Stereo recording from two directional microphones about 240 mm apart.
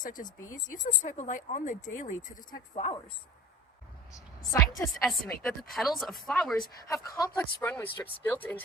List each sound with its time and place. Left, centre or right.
0.0 s speech: left
5.0 s a woman's voice: centre
6.8 s speech: centre